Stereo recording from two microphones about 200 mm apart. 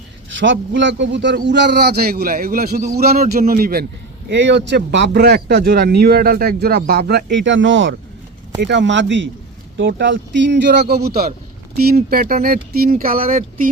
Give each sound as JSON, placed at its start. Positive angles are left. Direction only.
{"t": 0.3, "sound": "a man's voice", "side_deg": -70}
{"t": 4.3, "sound": "a man's voice", "side_deg": -65}